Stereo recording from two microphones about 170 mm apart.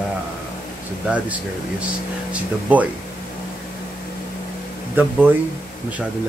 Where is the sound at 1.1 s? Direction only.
5° right (ahead or behind).